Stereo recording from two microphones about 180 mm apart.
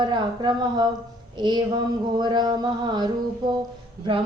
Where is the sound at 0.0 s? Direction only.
25° right (ahead or behind).